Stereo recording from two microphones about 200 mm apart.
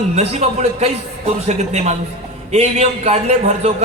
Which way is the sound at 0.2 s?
30° right (ahead or behind).